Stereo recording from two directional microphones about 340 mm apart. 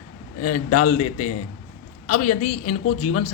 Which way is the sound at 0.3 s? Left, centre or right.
Left.